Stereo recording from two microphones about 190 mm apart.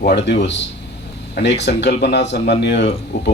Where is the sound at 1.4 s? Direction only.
65° left (ahead or behind).